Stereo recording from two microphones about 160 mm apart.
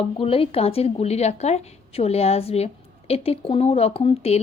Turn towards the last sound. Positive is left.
turn(degrees=40)  # may be behind; listen again after turning